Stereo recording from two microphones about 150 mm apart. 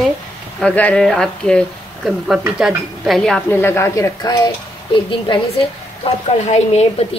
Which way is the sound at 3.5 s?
15° left (ahead or behind).